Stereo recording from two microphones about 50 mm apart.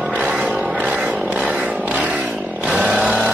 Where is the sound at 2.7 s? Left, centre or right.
Right.